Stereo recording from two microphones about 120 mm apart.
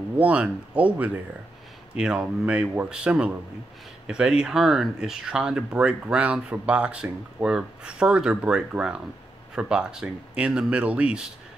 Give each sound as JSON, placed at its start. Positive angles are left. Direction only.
{"t": 0.2, "sound": "speech", "side_deg": -10}